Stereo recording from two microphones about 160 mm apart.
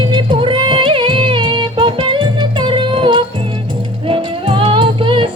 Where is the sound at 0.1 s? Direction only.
30° right (ahead or behind).